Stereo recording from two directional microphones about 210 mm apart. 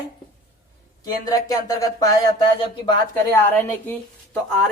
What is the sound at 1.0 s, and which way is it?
A woman's voice, 15° left (ahead or behind).